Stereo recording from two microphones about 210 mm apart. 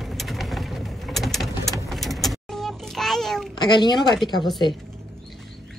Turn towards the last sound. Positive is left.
turn(degrees=20)  # may be behind; listen again after turning